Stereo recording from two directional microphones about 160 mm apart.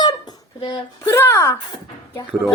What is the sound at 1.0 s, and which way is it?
Speech, 20° left (ahead or behind).